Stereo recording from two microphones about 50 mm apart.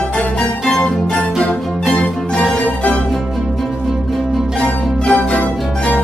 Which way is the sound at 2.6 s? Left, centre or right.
Left.